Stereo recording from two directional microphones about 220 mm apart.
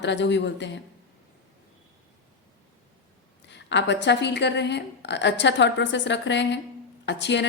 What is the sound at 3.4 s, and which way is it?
A woman's voice, 55° left (ahead or behind).